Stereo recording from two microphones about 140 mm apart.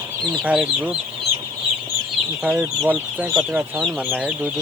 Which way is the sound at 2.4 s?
10° right (ahead or behind).